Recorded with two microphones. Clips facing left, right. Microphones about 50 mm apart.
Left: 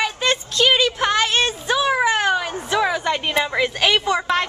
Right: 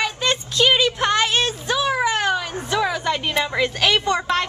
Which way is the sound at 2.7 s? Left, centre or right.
Centre.